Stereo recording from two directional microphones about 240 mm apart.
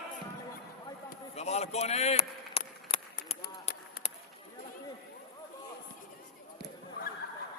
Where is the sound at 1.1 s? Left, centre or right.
Left.